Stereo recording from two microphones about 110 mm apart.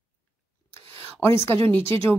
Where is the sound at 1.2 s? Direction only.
20° left (ahead or behind).